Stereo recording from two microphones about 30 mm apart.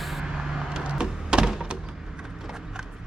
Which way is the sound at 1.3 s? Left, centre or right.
Right.